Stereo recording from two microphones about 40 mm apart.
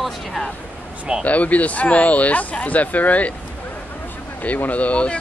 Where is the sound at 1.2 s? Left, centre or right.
Left.